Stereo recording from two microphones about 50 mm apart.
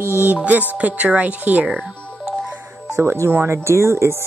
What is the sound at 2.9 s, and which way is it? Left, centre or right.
Speech, right.